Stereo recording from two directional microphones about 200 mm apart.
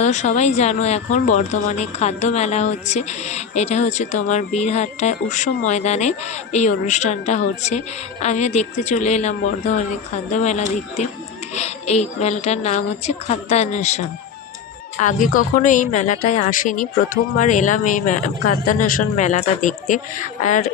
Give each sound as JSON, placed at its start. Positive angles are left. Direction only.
{"t": 0.0, "sound": "speech", "side_deg": 35}
{"t": 15.0, "sound": "speech", "side_deg": 40}